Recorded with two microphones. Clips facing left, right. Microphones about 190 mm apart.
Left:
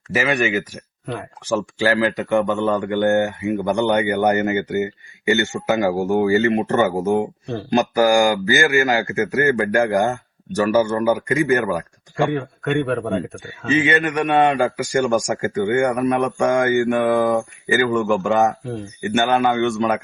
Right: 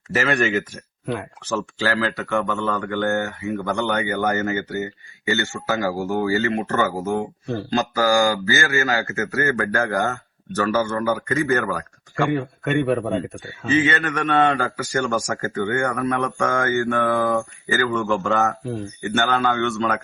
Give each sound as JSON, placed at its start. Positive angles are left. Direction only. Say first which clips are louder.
{"t": 0.1, "sound": "a man's voice", "louder": "left 1 dB", "side_deg": 10}
{"t": 12.3, "sound": "speech", "louder": "even", "side_deg": 0}
{"t": 13.3, "sound": "a man's voice", "louder": "left 1 dB", "side_deg": 15}